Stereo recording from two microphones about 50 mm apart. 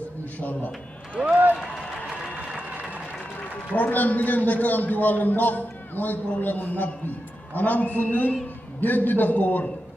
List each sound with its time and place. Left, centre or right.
0.4 s a man's voice: left
1.2 s run: right
3.7 s a man's voice: left